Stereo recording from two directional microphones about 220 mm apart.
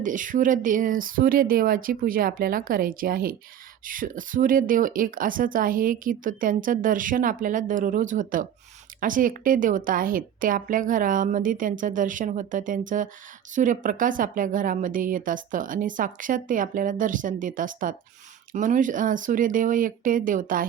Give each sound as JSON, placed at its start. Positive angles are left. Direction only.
{"t": 0.0, "sound": "speech", "side_deg": -35}